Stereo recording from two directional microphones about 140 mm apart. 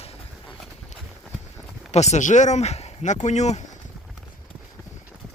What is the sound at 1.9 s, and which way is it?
Speech, 50° left (ahead or behind).